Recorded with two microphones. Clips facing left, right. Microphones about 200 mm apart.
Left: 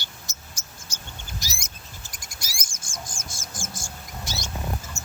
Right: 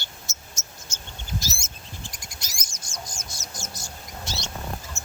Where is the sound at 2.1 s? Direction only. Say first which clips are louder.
Right 2 dB; 45° left (ahead or behind).